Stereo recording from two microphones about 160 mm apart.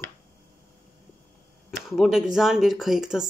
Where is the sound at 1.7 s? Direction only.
Centre (ahead or behind).